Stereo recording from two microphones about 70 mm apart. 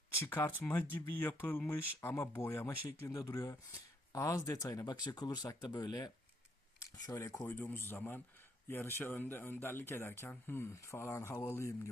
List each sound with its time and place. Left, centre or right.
0.2 s speech: left
3.1 s speech: left
4.9 s speech: left
5.6 s speech: left
6.7 s speech: left
7.3 s speech: left